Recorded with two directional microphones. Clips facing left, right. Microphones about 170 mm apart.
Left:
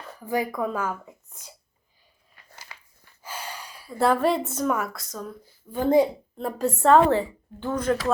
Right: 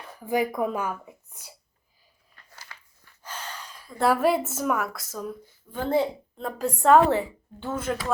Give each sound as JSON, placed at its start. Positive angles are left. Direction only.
{"t": 0.3, "sound": "speech", "side_deg": -15}
{"t": 2.3, "sound": "a sound", "side_deg": 10}
{"t": 4.0, "sound": "a woman's voice", "side_deg": -5}
{"t": 5.7, "sound": "speech", "side_deg": 15}
{"t": 6.3, "sound": "a woman's voice", "side_deg": 5}
{"t": 7.1, "sound": "speech", "side_deg": -15}